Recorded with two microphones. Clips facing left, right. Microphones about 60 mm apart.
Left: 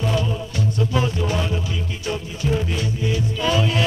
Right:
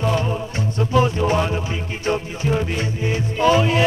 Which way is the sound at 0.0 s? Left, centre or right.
Right.